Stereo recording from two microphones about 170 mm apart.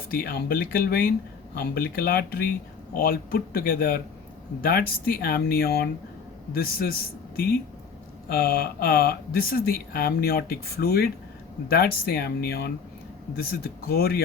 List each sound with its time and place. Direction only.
0.1 s speech: 65° left (ahead or behind)
8.3 s speech: 60° left (ahead or behind)